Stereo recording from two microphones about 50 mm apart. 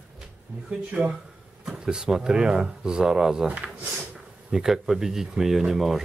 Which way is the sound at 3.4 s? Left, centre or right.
Right.